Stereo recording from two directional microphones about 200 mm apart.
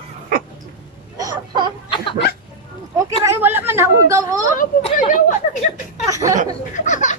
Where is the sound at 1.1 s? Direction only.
20° right (ahead or behind).